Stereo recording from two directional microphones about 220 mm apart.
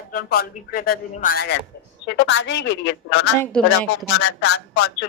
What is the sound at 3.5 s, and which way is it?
Speech, 5° left (ahead or behind).